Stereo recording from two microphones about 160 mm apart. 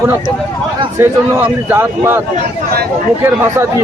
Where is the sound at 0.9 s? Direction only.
15° right (ahead or behind).